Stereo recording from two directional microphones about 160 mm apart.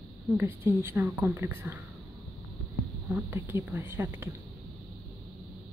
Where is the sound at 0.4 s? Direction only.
15° right (ahead or behind).